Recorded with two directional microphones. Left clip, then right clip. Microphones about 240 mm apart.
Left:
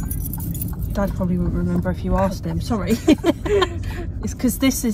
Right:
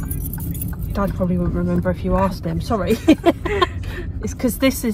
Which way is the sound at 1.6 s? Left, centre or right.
Centre.